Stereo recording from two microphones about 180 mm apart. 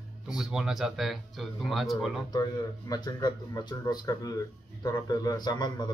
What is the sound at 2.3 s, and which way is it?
Speech, 20° left (ahead or behind).